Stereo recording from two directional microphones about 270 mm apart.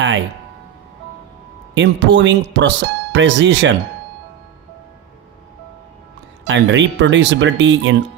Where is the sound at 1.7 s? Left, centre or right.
Right.